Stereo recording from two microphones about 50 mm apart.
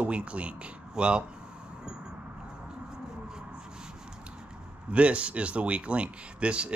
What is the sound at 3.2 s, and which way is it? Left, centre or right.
Rub, centre.